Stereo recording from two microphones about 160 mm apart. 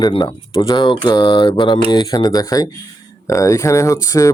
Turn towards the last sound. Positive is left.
turn(degrees=20)  # may be behind; listen again after turning